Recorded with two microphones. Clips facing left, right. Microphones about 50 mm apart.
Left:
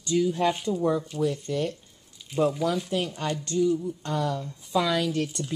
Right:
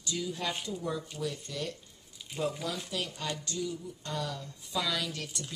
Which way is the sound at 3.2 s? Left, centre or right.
Left.